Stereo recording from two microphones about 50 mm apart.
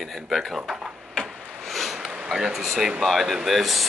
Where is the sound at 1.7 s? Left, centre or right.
Centre.